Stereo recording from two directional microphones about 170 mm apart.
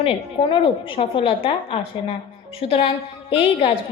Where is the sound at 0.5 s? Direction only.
30° left (ahead or behind).